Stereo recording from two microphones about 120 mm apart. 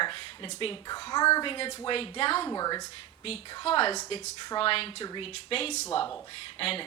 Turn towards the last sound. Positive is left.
turn(degrees=50)  # may be behind; listen again after turning